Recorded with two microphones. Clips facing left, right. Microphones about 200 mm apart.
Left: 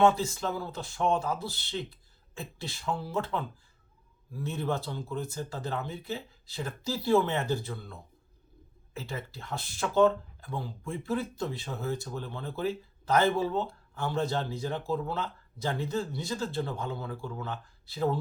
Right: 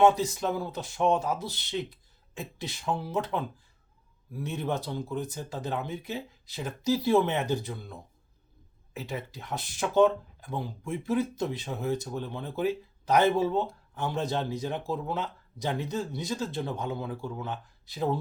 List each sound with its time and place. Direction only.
0.0 s speech: 15° right (ahead or behind)